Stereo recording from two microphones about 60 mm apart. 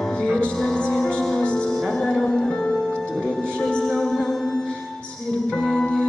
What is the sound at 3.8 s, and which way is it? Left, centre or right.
A capella, centre.